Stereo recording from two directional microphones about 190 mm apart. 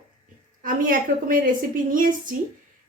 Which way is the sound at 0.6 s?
45° right (ahead or behind).